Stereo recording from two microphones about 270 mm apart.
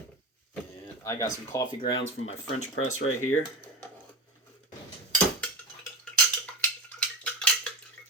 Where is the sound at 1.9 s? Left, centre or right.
Left.